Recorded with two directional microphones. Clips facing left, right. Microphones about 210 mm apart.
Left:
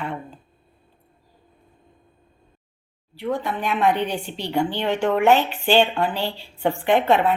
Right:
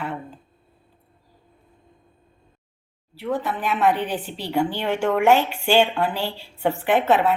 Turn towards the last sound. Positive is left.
turn(degrees=-5)  # may be behind; listen again after turning